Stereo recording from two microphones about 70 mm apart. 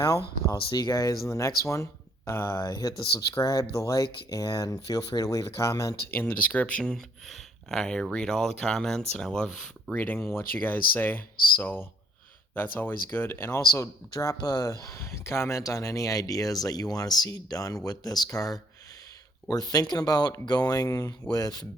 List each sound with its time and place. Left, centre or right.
0.0 s speech: left
3.2 s speech: left
6.1 s speech: left
6.9 s speech: centre
9.9 s speech: left
14.4 s speech: left
18.3 s speech: left
21.3 s speech: left